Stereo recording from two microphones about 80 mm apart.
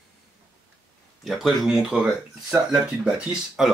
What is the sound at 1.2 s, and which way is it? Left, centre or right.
Speech, centre.